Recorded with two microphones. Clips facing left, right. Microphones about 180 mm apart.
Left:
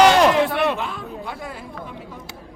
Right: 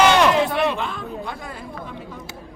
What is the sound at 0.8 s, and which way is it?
Speech, 5° left (ahead or behind).